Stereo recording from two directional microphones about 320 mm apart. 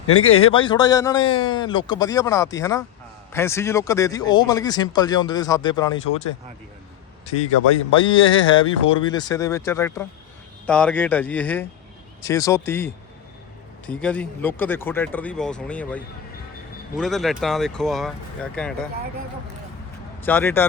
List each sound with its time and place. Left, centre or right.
0.1 s speech: left
0.5 s speech: centre
7.9 s speech: centre
20.2 s speech: centre